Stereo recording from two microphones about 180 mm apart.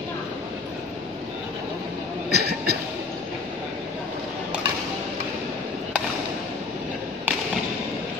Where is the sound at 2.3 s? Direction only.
65° right (ahead or behind).